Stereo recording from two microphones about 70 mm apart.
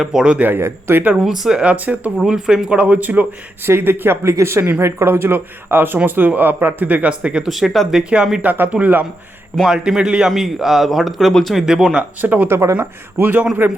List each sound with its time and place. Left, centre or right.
0.0 s speech: centre
0.4 s speech: right
1.2 s speech: centre
2.1 s speech: centre
7.4 s a man's voice: centre
8.1 s speech: centre
8.4 s speech: right
9.6 s a man's voice: centre
12.2 s speech: right